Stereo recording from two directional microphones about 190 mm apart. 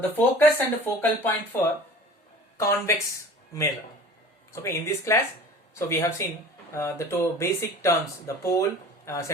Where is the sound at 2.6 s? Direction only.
15° left (ahead or behind).